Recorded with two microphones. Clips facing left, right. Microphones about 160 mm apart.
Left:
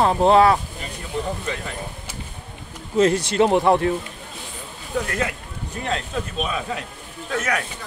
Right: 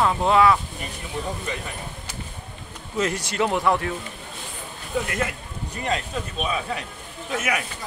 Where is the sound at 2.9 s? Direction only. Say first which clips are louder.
Left 7 dB; 30° left (ahead or behind).